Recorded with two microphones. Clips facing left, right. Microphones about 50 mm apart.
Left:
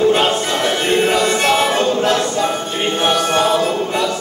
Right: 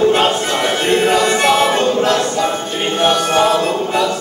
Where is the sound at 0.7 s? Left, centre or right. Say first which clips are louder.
Right 2 dB; centre.